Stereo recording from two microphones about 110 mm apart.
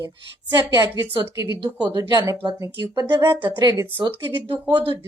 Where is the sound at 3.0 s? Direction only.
20° right (ahead or behind).